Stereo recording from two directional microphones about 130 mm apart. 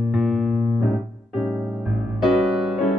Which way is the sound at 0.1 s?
5° right (ahead or behind).